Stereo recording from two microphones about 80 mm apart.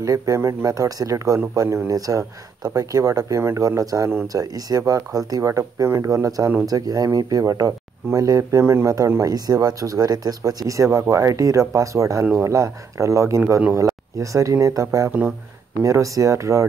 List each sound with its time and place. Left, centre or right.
0.0 s speech: right